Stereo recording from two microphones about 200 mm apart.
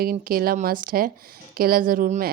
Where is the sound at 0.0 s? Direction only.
45° right (ahead or behind).